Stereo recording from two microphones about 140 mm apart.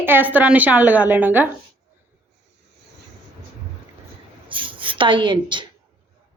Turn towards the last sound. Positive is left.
turn(degrees=-35)  # may be behind; listen again after turning